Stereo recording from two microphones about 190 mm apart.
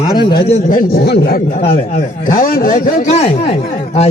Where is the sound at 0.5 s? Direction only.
45° left (ahead or behind).